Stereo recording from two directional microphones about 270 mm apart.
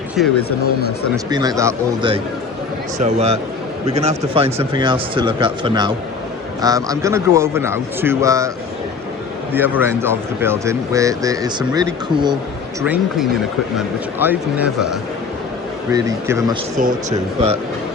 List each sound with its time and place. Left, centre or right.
0.2 s speech: centre
1.1 s speech: centre
9.5 s speech: centre
16.7 s speech: right